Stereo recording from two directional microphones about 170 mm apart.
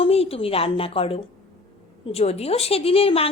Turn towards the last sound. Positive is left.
turn(degrees=35)  # may be behind; listen again after turning